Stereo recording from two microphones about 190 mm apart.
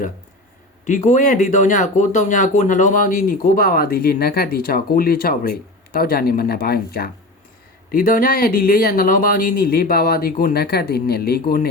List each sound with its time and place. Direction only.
0.9 s speech: 40° left (ahead or behind)